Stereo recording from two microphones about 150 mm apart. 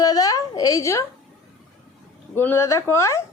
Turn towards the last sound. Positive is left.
turn(degrees=20)  # may be behind; listen again after turning